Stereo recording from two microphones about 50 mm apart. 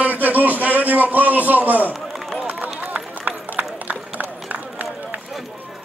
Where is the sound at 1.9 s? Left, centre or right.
Centre.